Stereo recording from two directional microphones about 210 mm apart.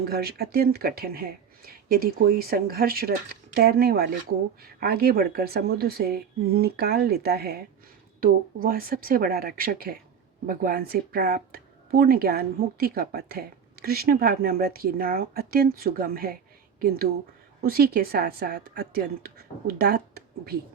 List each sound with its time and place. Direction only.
0.1 s a woman's voice: 50° right (ahead or behind)
8.6 s a woman's voice: 45° right (ahead or behind)
17.6 s a woman's voice: 45° right (ahead or behind)